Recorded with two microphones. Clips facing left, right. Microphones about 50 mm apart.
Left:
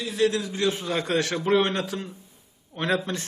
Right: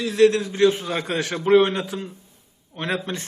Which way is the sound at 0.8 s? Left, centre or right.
Centre.